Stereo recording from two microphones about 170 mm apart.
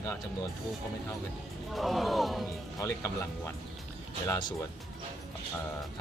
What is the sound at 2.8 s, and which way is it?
Speech, 15° left (ahead or behind).